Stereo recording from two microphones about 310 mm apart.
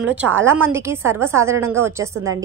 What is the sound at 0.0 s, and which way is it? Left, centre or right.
A woman's voice, centre.